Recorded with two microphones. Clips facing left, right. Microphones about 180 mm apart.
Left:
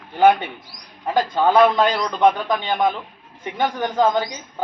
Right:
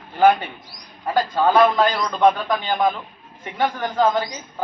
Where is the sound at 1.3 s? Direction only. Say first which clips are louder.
Left 1 dB; 20° left (ahead or behind).